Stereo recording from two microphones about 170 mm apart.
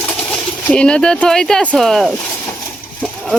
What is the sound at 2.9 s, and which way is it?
Horse, 5° left (ahead or behind).